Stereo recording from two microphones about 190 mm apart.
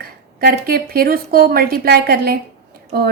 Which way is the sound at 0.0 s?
50° right (ahead or behind).